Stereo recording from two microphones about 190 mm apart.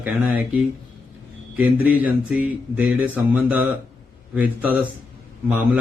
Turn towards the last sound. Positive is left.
turn(degrees=-10)  # may be behind; listen again after turning